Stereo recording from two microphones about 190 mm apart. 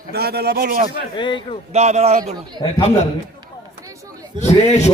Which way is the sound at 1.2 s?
25° left (ahead or behind).